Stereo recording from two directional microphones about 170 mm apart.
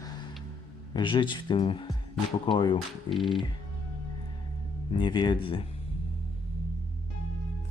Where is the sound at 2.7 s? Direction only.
Centre (ahead or behind).